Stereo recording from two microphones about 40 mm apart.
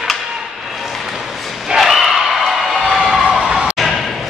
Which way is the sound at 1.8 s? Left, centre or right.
Centre.